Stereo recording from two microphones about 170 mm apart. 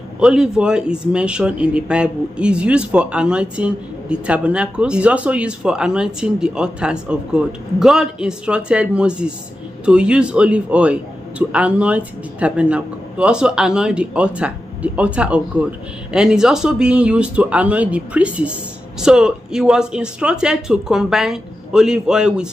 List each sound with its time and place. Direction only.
0.2 s a man's voice: 5° right (ahead or behind)